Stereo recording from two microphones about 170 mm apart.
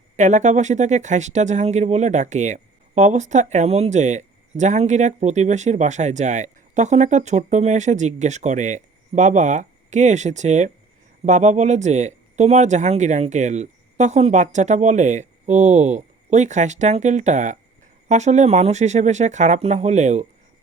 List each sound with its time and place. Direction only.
0.2 s speech: 45° right (ahead or behind)